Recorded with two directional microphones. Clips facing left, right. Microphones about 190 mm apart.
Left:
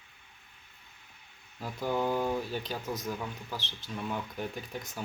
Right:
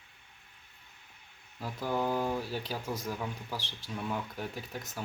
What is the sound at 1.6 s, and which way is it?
Speech, 5° right (ahead or behind).